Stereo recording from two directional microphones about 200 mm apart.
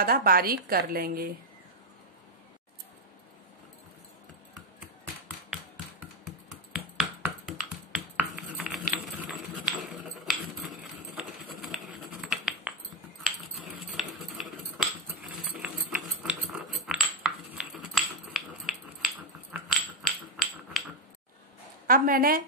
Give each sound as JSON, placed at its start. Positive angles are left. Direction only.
{"t": 0.0, "sound": "a woman's voice", "side_deg": -50}
{"t": 7.0, "sound": "a sound", "side_deg": -5}
{"t": 10.2, "sound": "patter", "side_deg": 0}
{"t": 13.2, "sound": "cutlery", "side_deg": 0}
{"t": 20.0, "sound": "rub", "side_deg": 0}
{"t": 21.8, "sound": "a sound", "side_deg": -45}